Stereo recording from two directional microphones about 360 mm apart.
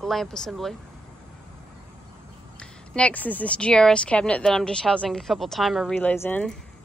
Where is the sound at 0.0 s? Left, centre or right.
Centre.